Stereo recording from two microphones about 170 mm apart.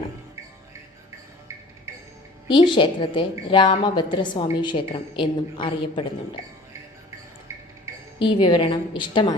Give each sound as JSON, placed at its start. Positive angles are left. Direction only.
{"t": 2.5, "sound": "a woman's voice", "side_deg": 30}
{"t": 8.2, "sound": "a woman's voice", "side_deg": 30}